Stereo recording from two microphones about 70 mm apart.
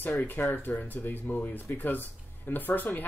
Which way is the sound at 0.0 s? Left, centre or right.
Left.